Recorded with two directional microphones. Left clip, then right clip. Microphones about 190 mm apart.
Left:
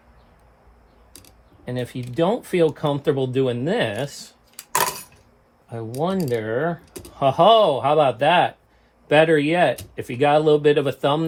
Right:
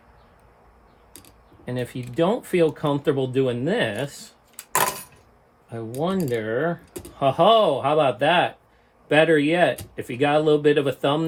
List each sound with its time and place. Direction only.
1.6 s speech: 5° left (ahead or behind)
4.7 s a sound: 5° left (ahead or behind)
6.0 s speech: 15° left (ahead or behind)
9.0 s speech: 15° left (ahead or behind)
10.4 s speech: 5° left (ahead or behind)
10.7 s speech: 15° left (ahead or behind)